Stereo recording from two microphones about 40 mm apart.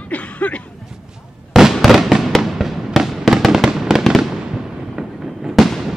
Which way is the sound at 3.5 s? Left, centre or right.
Centre.